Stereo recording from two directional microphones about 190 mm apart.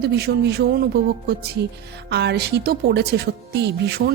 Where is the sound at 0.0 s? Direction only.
60° right (ahead or behind).